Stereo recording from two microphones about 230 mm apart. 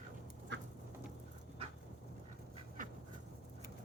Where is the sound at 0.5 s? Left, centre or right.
Right.